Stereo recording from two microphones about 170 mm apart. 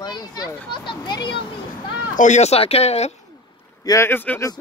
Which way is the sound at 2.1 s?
45° left (ahead or behind).